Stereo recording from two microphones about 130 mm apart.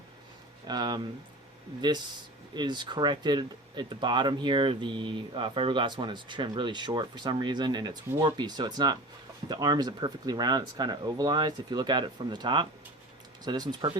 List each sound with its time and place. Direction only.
0.7 s speech: 30° right (ahead or behind)
2.6 s speech: 35° right (ahead or behind)